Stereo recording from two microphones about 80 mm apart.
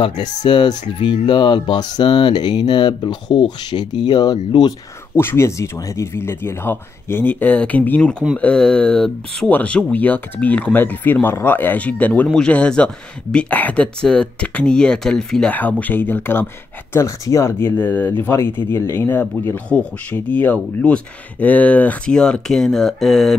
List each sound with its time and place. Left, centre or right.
0.0 s speech: left
5.1 s speech: left; by 15.5 s centre
15.5 s speech: left
16.9 s speech: left; by 23.3 s centre